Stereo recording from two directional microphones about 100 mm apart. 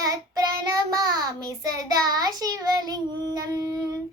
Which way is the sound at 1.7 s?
40° right (ahead or behind).